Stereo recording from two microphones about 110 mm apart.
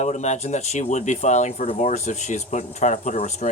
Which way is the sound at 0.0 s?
90° left.